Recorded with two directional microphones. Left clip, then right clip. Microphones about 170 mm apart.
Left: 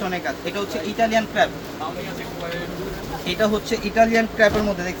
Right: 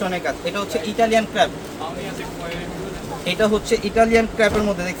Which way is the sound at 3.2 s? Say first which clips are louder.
Right 3 dB; 10° right (ahead or behind).